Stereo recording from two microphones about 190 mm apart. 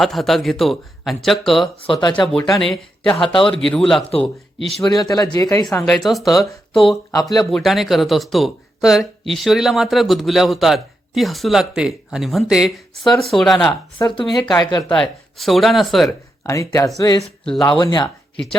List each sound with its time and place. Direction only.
0.0 s speech: centre (ahead or behind)
1.8 s speech: 25° left (ahead or behind)
2.2 s speech: centre (ahead or behind)
4.8 s speech: 15° left (ahead or behind)
5.8 s speech: centre (ahead or behind)
7.1 s speech: 20° left (ahead or behind)
7.3 s speech: centre (ahead or behind)
14.5 s speech: 20° left (ahead or behind)
14.9 s speech: centre (ahead or behind)
16.4 s speech: 15° left (ahead or behind)